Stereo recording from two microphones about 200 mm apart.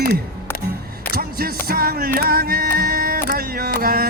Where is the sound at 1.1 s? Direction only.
50° right (ahead or behind).